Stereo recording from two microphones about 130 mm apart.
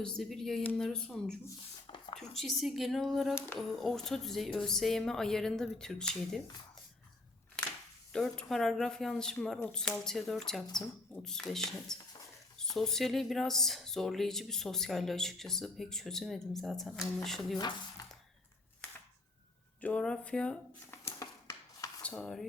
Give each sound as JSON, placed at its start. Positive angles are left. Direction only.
{"t": 0.0, "sound": "speech", "side_deg": 0}
{"t": 8.1, "sound": "speech", "side_deg": 5}
{"t": 19.8, "sound": "speech", "side_deg": 10}
{"t": 20.9, "sound": "a sound", "side_deg": 20}
{"t": 22.0, "sound": "speech", "side_deg": 5}